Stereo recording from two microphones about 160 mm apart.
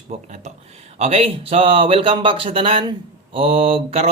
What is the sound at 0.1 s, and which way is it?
Speech, 40° right (ahead or behind).